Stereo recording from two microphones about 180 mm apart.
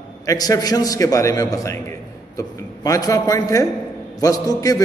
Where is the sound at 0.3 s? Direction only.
20° left (ahead or behind).